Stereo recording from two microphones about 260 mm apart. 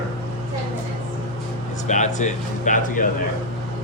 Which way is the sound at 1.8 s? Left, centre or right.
Left.